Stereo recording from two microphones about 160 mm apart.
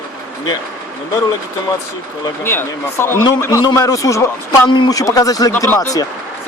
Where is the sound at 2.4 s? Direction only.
15° left (ahead or behind).